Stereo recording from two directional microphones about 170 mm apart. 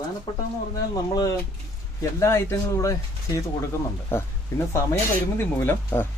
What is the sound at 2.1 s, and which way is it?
Speech, 15° left (ahead or behind).